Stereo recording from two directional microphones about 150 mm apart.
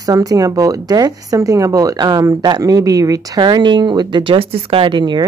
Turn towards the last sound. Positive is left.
turn(degrees=-30)  # may be behind; listen again after turning